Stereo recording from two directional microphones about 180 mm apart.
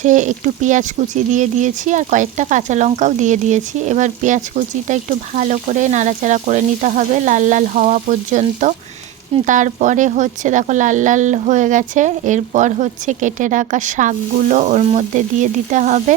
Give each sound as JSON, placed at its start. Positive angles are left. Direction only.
{"t": 0.0, "sound": "speech", "side_deg": -45}